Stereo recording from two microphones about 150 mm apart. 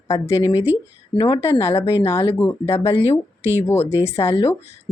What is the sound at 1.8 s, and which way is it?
Speech, 20° left (ahead or behind).